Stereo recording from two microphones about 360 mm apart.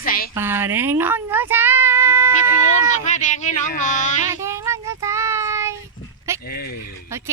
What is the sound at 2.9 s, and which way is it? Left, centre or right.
Speech, centre.